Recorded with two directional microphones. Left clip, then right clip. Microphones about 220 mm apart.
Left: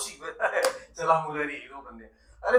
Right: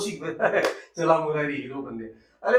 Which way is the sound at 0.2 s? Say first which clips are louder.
Right 3 dB; 55° left (ahead or behind).